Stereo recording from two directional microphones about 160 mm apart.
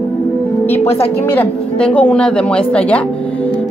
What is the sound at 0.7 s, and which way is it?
Speech, 15° left (ahead or behind).